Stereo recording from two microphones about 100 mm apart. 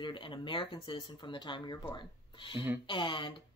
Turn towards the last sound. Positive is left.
turn(degrees=60)  # may be behind; listen again after turning